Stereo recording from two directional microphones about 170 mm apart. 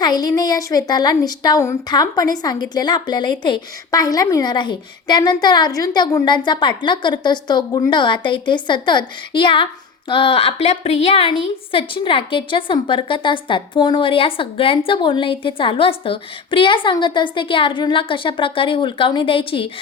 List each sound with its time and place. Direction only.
0.0 s a woman's voice: 25° left (ahead or behind)